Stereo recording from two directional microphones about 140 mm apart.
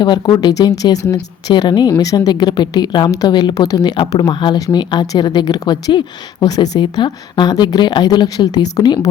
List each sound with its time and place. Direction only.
0.0 s a woman's voice: 30° left (ahead or behind)